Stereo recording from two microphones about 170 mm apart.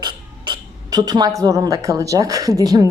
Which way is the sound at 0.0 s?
25° right (ahead or behind).